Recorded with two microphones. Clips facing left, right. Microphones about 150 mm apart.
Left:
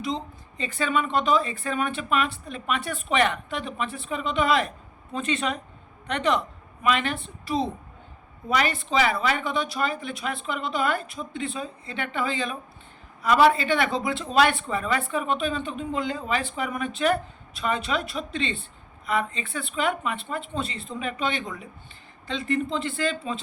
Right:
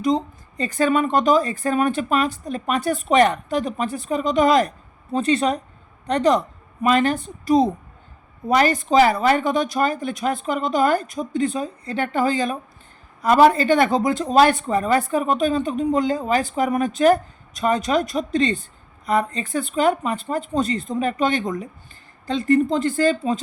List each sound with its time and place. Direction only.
0.0 s speech: 45° right (ahead or behind)